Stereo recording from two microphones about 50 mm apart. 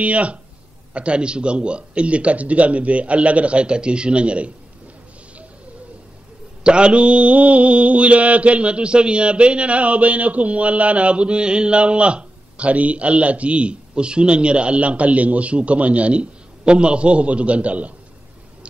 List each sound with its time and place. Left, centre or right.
0.0 s mantra: right
6.6 s mantra: right